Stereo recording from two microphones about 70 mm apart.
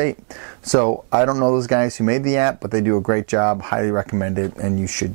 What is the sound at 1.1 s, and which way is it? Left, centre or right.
Speech, right.